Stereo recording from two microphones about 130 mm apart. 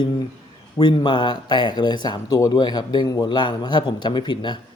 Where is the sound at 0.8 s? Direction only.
35° left (ahead or behind).